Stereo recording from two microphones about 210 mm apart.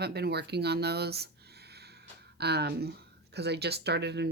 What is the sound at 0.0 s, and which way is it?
Speech, 50° right (ahead or behind).